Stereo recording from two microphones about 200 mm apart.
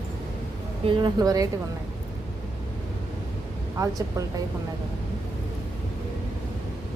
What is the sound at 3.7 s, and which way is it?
Speech, 15° right (ahead or behind).